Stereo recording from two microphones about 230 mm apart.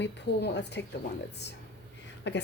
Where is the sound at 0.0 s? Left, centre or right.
Left.